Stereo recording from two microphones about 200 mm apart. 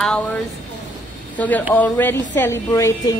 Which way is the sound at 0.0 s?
5° left (ahead or behind).